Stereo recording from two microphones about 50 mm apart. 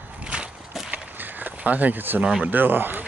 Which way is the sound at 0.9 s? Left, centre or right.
Right.